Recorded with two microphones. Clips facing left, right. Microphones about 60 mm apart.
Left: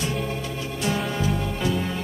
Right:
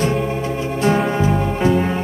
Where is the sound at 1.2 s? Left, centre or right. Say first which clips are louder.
Right 8 dB; right.